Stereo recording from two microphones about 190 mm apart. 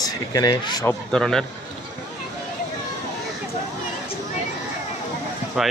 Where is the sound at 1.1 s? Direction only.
5° left (ahead or behind).